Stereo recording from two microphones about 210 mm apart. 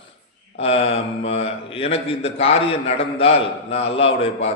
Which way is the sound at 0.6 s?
30° left (ahead or behind).